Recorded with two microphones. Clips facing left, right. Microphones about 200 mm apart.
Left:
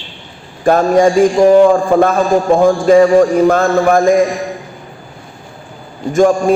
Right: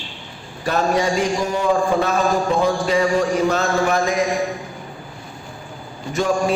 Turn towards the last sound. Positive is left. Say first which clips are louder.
# left 9 dB
turn(degrees=50)  # may be behind; listen again after turning